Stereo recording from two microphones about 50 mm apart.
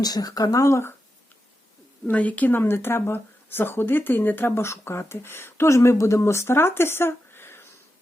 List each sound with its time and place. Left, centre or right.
0.6 s speech: left
2.0 s speech: left
2.6 s speech: left
4.5 s speech: left